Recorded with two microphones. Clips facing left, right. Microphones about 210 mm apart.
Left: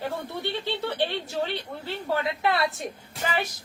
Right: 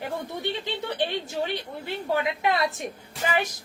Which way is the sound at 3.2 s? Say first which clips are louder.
Right 2 dB; 15° right (ahead or behind).